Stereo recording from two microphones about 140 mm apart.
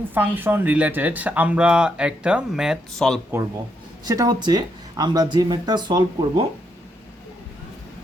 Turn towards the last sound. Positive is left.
turn(degrees=-30)  # may be behind; listen again after turning